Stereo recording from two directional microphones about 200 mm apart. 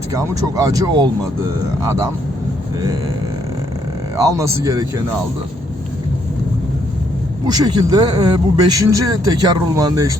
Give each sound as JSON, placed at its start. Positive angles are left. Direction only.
{"t": 0.1, "sound": "speech", "side_deg": -15}
{"t": 4.2, "sound": "speech", "side_deg": -15}
{"t": 7.4, "sound": "speech", "side_deg": -20}